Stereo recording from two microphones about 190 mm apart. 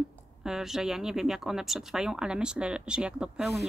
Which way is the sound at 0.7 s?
Centre (ahead or behind).